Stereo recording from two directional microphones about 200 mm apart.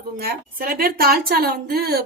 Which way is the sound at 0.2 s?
45° right (ahead or behind).